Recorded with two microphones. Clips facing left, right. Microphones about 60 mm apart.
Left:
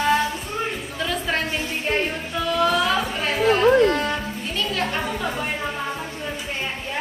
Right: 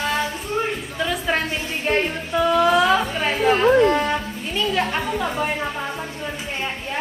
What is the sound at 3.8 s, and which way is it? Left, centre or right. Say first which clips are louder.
Music: right 2 dB; right.